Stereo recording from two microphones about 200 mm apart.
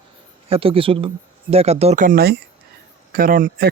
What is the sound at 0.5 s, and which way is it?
Speech, 25° right (ahead or behind).